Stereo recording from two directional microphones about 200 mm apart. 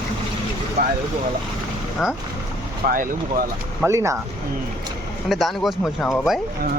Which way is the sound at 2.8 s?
45° right (ahead or behind).